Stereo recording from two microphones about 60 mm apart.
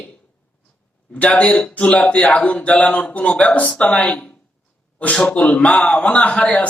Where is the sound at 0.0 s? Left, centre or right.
Centre.